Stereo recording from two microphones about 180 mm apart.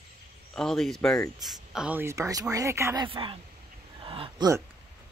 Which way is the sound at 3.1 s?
30° right (ahead or behind).